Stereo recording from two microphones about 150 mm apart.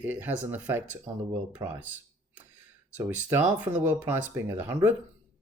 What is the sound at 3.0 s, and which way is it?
Speech, 15° right (ahead or behind).